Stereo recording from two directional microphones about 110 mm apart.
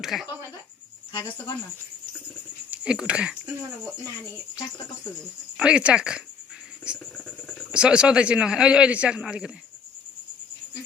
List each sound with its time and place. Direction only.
0.0 s speech: centre (ahead or behind)
1.1 s speech: 40° left (ahead or behind)
2.6 s speech: 10° right (ahead or behind)
5.5 s a man's voice: 10° right (ahead or behind)
7.7 s a man's voice: 10° right (ahead or behind)